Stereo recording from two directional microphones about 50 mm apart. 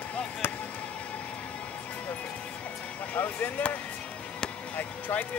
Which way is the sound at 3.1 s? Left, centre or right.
Left.